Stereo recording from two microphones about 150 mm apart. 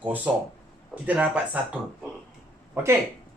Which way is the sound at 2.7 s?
15° right (ahead or behind).